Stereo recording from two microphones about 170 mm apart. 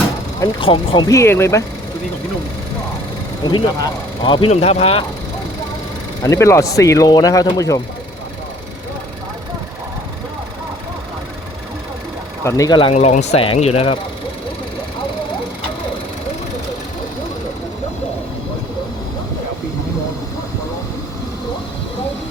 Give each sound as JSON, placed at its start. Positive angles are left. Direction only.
{"t": 0.3, "sound": "speech", "side_deg": 25}
{"t": 3.4, "sound": "speech", "side_deg": 25}
{"t": 6.2, "sound": "speech", "side_deg": 15}
{"t": 12.5, "sound": "speech", "side_deg": 20}
{"t": 12.9, "sound": "speech", "side_deg": 40}